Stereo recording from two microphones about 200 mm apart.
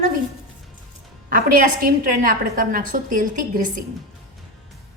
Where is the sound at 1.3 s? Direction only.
45° right (ahead or behind).